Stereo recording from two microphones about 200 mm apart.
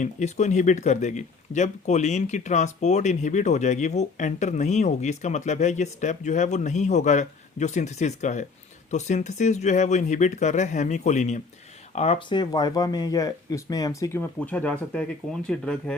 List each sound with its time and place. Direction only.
0.0 s speech: 35° left (ahead or behind); by 16.0 s 5° left (ahead or behind)